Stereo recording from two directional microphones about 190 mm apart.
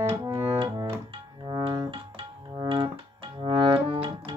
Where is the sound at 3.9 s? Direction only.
25° right (ahead or behind).